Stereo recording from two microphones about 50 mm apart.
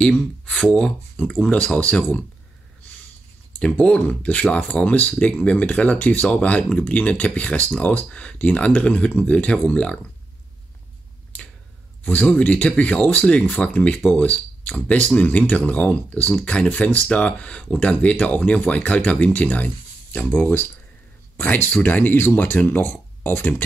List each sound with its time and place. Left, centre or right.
0.5 s speech: centre
1.4 s speech: left
3.5 s speech: left
12.0 s speech: left